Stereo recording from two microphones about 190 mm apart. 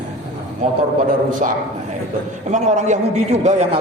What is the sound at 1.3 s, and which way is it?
A man's voice, 45° right (ahead or behind).